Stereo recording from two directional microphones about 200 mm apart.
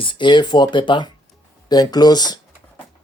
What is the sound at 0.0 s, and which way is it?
Speech, 25° left (ahead or behind).